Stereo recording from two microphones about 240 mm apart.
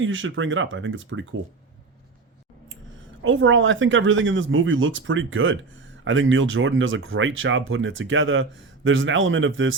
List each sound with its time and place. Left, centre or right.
0.0 s speech: right
3.2 s speech: right